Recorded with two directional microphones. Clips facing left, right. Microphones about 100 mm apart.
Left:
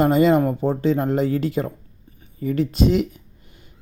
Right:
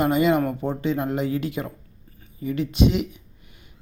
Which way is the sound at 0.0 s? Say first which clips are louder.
Left 4 dB; 35° left (ahead or behind).